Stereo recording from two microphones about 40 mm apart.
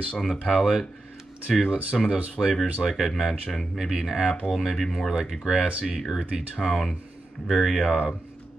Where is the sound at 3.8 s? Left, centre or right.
Centre.